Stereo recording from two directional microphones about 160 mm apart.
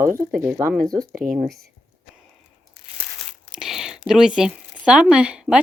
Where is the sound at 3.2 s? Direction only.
Centre (ahead or behind).